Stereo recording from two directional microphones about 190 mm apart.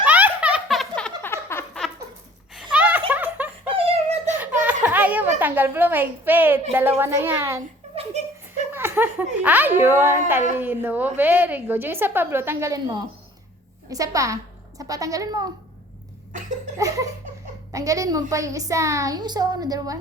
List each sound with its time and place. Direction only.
0.0 s a sound: 10° right (ahead or behind); by 1.8 s 10° left (ahead or behind)
2.7 s laughter: 10° right (ahead or behind)
3.1 s snicker: 10° right (ahead or behind)
3.8 s a sound: 30° right (ahead or behind)
4.6 s a child's voice: 10° right (ahead or behind)
8.7 s a woman's voice: 10° right (ahead or behind)
16.7 s laughter: 15° right (ahead or behind)
17.7 s a woman's voice: 15° right (ahead or behind)